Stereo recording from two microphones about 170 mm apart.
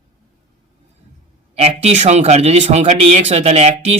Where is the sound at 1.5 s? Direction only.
40° right (ahead or behind).